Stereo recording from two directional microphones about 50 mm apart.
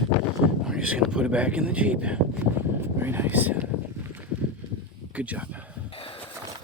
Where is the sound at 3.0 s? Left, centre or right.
Right.